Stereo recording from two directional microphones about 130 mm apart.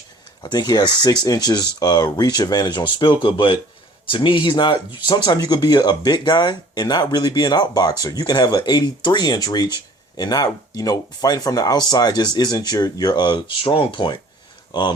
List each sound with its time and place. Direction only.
0.4 s speech: 35° left (ahead or behind)